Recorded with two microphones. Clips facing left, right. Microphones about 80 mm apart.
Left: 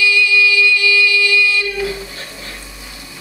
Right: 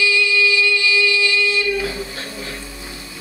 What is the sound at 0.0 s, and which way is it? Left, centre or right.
Music, right.